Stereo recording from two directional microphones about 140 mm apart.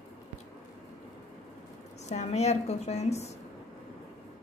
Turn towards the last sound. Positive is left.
turn(degrees=50)  # may be behind; listen again after turning